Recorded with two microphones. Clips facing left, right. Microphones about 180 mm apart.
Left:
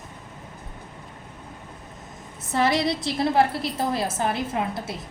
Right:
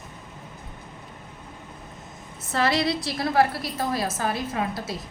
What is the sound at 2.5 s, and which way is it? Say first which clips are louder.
A woman's voice: left 1 dB; 20° left (ahead or behind).